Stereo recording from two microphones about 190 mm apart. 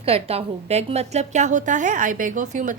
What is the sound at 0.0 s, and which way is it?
A woman's voice, 30° right (ahead or behind).